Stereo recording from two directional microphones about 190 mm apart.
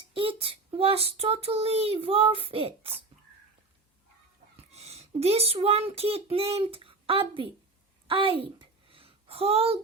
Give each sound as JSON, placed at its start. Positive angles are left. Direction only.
{"t": 0.1, "sound": "child singing", "side_deg": -30}
{"t": 4.5, "sound": "speech", "side_deg": -35}
{"t": 8.0, "sound": "a sound", "side_deg": -25}